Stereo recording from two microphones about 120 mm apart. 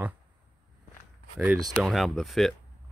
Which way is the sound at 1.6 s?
Centre (ahead or behind).